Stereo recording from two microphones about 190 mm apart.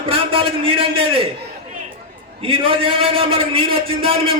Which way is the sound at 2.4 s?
30° right (ahead or behind).